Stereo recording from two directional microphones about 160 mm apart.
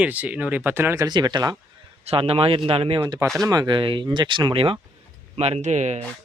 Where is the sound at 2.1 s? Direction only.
35° right (ahead or behind).